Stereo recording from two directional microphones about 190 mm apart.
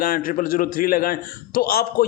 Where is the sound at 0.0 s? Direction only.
50° left (ahead or behind).